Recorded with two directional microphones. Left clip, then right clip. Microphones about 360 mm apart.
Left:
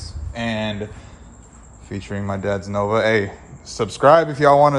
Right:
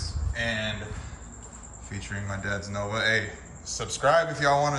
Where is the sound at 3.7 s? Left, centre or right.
Centre.